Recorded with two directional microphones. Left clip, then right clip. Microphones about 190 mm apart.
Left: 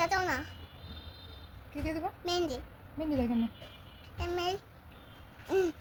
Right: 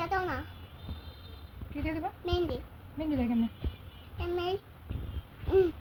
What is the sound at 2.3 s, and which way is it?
Speech, 15° left (ahead or behind).